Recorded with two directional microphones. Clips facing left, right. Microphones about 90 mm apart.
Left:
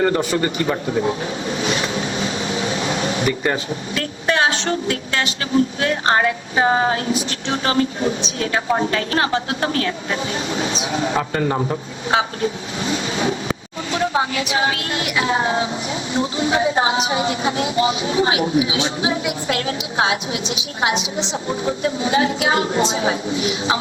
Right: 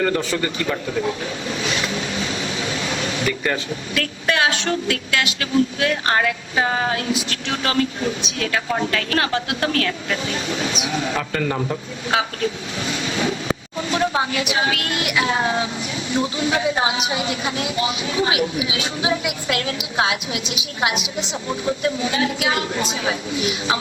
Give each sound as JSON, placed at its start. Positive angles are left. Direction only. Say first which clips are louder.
{"t": 0.0, "sound": "speech", "louder": "left 3 dB", "side_deg": 20}
{"t": 14.4, "sound": "a woman's voice", "louder": "left 1 dB", "side_deg": 30}